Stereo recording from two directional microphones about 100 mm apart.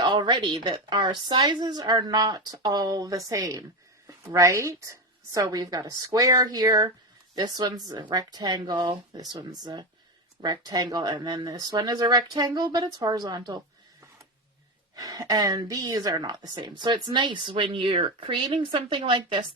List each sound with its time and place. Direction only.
0.0 s a woman's voice: 50° right (ahead or behind)
14.9 s a woman's voice: 35° right (ahead or behind); by 19.5 s 60° right (ahead or behind)